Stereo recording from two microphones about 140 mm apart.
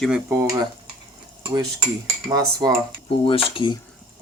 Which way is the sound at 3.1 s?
40° left (ahead or behind).